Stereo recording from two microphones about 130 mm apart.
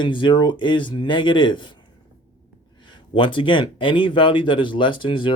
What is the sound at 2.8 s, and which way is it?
Speech, 40° left (ahead or behind).